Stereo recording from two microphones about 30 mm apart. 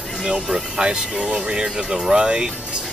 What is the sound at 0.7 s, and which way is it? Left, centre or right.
Speech, right.